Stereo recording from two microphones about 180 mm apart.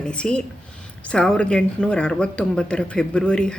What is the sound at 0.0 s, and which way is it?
A woman's voice, 5° left (ahead or behind).